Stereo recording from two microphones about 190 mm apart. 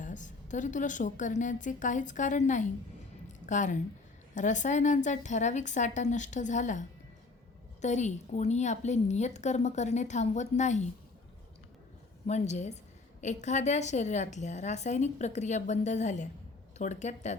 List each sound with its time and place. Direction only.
0.0 s a woman's voice: 40° left (ahead or behind)
12.2 s a woman's voice: 40° left (ahead or behind)